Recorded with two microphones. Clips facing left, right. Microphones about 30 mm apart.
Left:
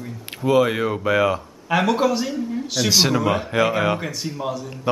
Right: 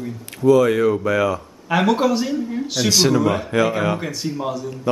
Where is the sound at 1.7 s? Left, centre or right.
Centre.